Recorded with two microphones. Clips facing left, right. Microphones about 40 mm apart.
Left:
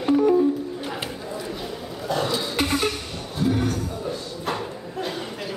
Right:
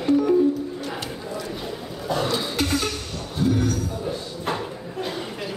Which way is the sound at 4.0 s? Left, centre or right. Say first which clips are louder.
Right 1 dB; centre.